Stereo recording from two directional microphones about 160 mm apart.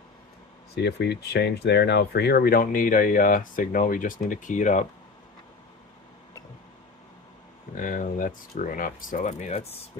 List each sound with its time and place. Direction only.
0.7 s speech: 90° left; by 4.8 s 50° left (ahead or behind)
7.8 s speech: 55° left (ahead or behind); by 9.8 s 40° left (ahead or behind)